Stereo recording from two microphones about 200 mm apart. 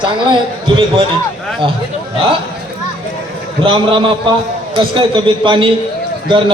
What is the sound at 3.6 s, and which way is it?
A man's voice, 25° right (ahead or behind).